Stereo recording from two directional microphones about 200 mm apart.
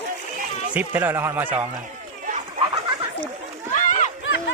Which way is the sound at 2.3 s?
40° right (ahead or behind).